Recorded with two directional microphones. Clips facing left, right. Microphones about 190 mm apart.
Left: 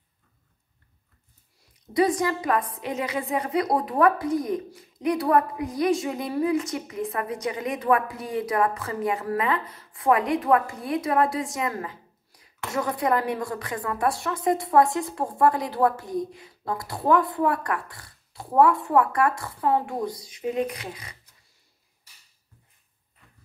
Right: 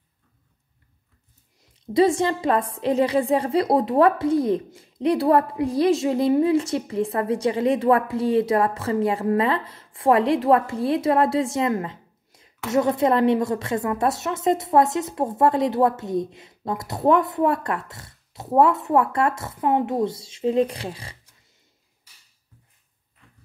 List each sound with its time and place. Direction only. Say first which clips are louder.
1.6 s a woman's voice: right 4 dB; 25° right (ahead or behind)